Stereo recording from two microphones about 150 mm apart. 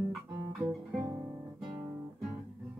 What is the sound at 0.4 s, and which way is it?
Guitar, 20° right (ahead or behind).